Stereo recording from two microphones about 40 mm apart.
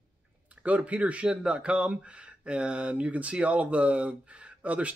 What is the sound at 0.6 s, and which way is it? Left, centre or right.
Speech, right.